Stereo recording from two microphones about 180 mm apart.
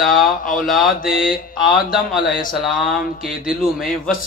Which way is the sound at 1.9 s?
Centre (ahead or behind).